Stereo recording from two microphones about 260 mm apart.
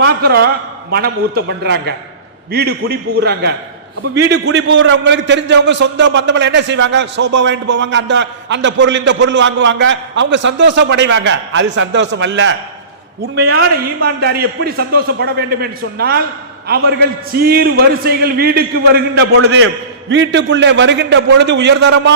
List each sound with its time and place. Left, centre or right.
0.0 s a man's voice: right